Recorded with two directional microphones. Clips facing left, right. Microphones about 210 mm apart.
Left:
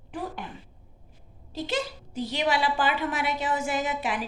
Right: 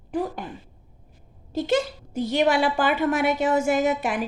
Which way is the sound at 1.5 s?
50° right (ahead or behind).